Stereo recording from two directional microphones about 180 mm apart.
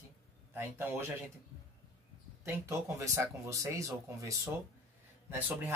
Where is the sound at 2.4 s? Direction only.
15° right (ahead or behind).